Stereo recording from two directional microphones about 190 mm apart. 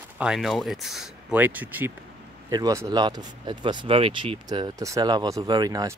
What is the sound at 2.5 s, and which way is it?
Speech, 20° right (ahead or behind).